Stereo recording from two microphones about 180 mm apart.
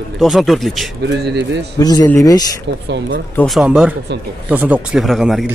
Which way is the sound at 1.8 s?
20° left (ahead or behind).